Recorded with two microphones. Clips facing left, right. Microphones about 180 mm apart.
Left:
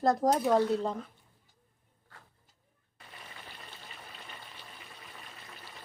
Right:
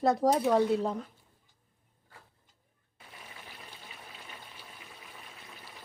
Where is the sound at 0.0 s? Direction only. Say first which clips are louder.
Right 1 dB; centre (ahead or behind).